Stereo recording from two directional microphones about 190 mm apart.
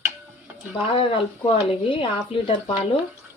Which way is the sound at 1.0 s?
30° left (ahead or behind).